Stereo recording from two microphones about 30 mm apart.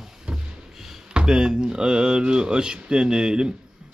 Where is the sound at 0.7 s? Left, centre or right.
Centre.